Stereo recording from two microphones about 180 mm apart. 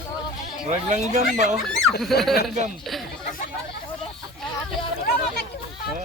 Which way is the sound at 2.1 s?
60° left (ahead or behind).